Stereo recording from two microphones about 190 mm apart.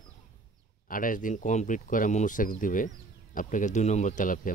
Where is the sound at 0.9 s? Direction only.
45° left (ahead or behind).